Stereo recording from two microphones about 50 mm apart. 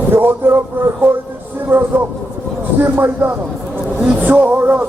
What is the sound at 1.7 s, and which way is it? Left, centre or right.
A man's voice, right.